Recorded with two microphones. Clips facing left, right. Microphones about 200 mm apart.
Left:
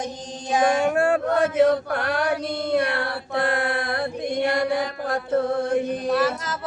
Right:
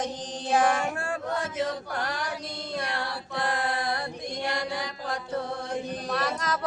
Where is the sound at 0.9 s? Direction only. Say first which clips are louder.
Left 11 dB; 65° left (ahead or behind).